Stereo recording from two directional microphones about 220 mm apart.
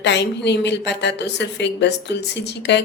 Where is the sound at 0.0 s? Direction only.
50° left (ahead or behind).